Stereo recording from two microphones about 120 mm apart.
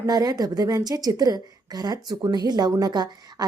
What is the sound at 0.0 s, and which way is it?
A woman's voice, 30° right (ahead or behind).